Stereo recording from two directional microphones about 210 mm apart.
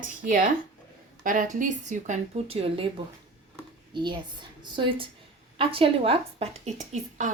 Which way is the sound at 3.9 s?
20° right (ahead or behind).